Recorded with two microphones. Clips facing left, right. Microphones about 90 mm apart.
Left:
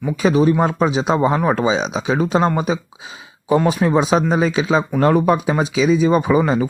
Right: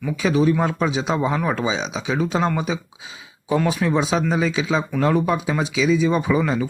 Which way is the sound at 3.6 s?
35° left (ahead or behind).